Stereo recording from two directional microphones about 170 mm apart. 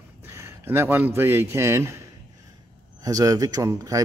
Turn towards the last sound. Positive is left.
turn(degrees=-20)  # may be behind; listen again after turning